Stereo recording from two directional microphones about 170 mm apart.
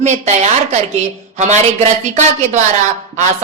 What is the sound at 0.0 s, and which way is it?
A woman's voice, 45° right (ahead or behind).